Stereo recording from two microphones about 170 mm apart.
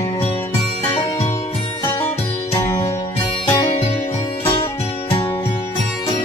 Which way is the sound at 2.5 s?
20° left (ahead or behind).